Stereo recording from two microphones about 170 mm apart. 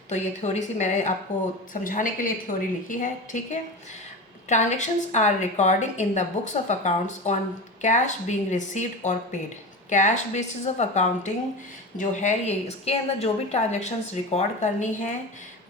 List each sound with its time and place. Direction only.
0.1 s a woman's voice: 45° left (ahead or behind)